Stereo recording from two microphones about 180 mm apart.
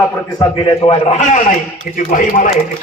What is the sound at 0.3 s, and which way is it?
A man's voice, 25° left (ahead or behind).